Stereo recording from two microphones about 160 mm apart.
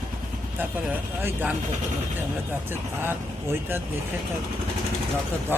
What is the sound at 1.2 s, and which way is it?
Speech, 15° right (ahead or behind).